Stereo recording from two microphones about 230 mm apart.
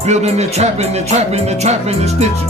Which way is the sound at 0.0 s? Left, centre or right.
Right.